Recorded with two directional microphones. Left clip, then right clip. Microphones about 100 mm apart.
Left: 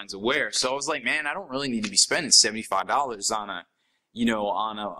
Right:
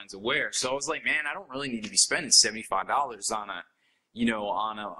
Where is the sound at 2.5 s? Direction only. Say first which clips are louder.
Left 3 dB; 40° left (ahead or behind).